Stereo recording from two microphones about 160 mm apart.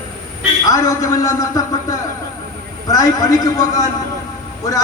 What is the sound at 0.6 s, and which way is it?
Speech, 20° left (ahead or behind).